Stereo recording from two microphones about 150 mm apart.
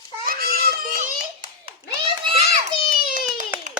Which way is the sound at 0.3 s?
85° right.